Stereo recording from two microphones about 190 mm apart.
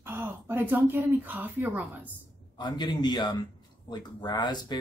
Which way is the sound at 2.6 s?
25° left (ahead or behind).